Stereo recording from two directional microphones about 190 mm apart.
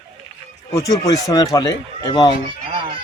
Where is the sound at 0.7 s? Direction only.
15° left (ahead or behind).